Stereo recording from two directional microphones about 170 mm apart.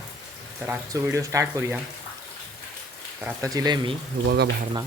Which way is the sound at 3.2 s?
20° right (ahead or behind).